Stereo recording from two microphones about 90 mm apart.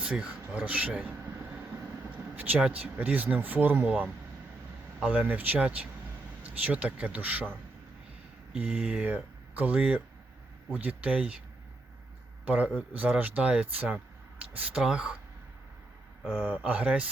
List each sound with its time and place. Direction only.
0.0 s speech: 15° right (ahead or behind)
2.3 s speech: 15° right (ahead or behind)
8.7 s speech: 10° right (ahead or behind)
12.5 s speech: 15° right (ahead or behind)
16.5 s speech: 15° right (ahead or behind)